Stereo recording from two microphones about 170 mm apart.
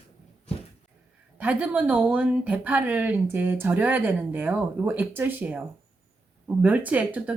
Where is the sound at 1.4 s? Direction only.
10° right (ahead or behind).